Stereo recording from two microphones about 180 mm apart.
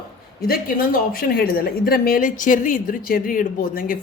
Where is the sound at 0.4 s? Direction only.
55° left (ahead or behind).